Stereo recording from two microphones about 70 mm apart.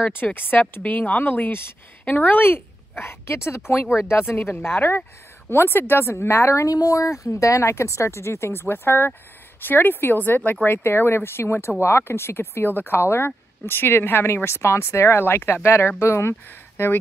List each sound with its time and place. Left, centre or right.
0.0 s a woman's voice: left
6.7 s speech: left